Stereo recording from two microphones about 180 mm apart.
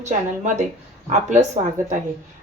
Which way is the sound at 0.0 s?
40° right (ahead or behind).